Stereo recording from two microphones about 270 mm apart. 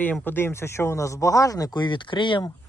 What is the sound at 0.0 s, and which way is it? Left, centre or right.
Speech, centre.